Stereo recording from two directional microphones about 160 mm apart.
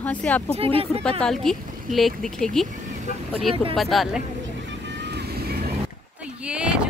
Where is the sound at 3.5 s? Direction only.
35° right (ahead or behind).